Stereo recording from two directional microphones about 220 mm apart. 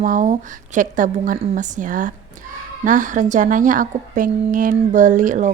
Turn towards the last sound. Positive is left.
turn(degrees=-35)  # may be behind; listen again after turning